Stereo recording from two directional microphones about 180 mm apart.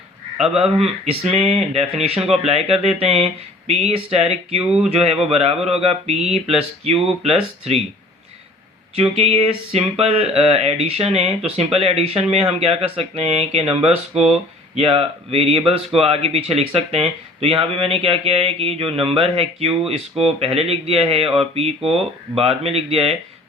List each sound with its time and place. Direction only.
0.5 s speech: 35° right (ahead or behind)
9.0 s speech: 35° right (ahead or behind)